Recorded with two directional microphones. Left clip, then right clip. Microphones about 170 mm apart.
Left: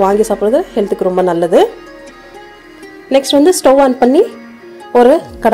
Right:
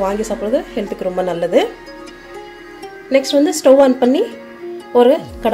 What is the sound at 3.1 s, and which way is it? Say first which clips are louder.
Speech: left 4 dB; 40° left (ahead or behind).